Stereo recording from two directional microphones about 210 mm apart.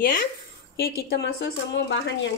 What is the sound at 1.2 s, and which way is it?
Speech, 55° left (ahead or behind).